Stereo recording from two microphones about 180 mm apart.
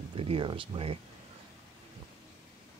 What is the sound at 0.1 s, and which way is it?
Speech, 30° right (ahead or behind).